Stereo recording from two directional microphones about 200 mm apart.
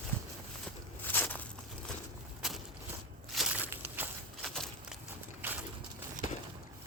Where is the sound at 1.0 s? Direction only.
10° left (ahead or behind).